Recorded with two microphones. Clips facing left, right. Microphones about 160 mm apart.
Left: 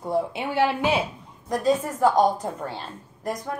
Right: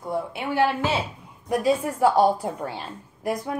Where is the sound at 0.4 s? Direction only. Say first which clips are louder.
Right 4 dB; 20° left (ahead or behind).